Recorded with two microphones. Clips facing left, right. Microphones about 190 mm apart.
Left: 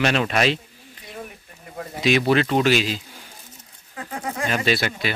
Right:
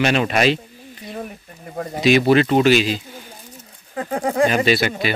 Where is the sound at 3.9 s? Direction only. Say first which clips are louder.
Right 10 dB; 45° right (ahead or behind).